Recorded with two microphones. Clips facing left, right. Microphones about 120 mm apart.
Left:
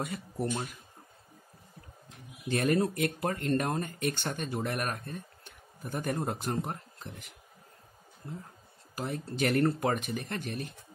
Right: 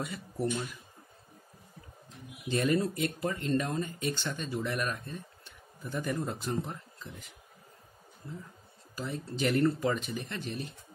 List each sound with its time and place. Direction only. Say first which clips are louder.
0.0 s speech: even; 50° left (ahead or behind)
2.4 s speech: left 1 dB; 55° left (ahead or behind)
8.9 s speech: left 1 dB; 55° left (ahead or behind)